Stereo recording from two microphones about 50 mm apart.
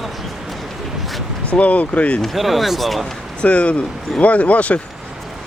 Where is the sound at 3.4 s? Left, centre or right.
Left.